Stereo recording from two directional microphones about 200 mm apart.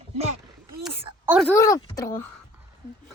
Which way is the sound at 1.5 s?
15° left (ahead or behind).